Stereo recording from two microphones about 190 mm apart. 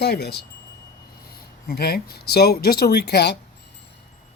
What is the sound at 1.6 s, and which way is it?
Speech, 55° left (ahead or behind).